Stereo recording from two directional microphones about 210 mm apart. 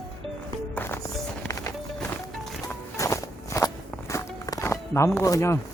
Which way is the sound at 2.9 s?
15° left (ahead or behind).